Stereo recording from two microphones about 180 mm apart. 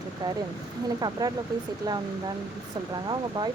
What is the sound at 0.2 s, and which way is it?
Speech, 20° right (ahead or behind).